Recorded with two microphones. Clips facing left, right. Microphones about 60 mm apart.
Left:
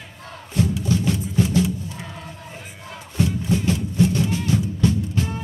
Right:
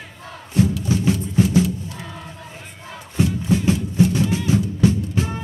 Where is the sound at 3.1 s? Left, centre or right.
Right.